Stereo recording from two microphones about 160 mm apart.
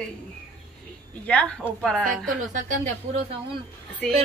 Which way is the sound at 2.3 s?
50° right (ahead or behind).